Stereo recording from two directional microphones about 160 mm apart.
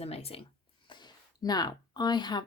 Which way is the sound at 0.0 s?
40° left (ahead or behind).